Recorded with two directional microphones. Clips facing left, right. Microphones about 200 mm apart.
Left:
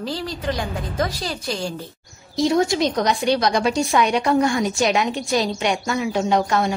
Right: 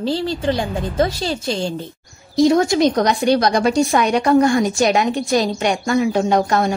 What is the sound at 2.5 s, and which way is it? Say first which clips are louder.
A woman's voice: right 3 dB; 45° right (ahead or behind).